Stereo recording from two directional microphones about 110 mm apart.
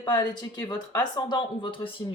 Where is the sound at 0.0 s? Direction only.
45° left (ahead or behind).